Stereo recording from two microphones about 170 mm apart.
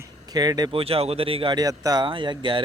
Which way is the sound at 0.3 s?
25° right (ahead or behind).